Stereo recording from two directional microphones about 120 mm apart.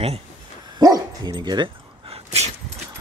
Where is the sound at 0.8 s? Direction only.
35° right (ahead or behind).